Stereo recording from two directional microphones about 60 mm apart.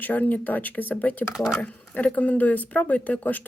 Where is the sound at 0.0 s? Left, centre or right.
Left.